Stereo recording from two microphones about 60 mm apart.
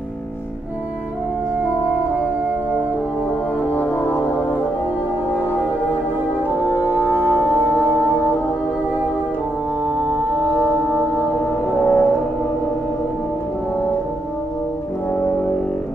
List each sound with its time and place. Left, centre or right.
3.6 s music: left
6.7 s french horn: left
11.8 s brass instrument: left